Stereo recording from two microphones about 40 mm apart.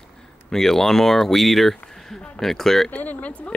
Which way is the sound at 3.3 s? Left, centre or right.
Left.